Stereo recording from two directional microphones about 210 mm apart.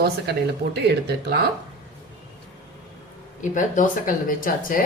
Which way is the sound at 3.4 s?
35° left (ahead or behind).